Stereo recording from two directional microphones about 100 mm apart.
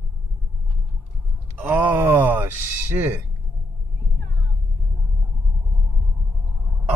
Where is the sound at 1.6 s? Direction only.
15° right (ahead or behind).